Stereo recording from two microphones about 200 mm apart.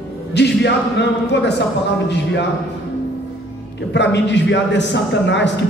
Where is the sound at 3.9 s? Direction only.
60° left (ahead or behind).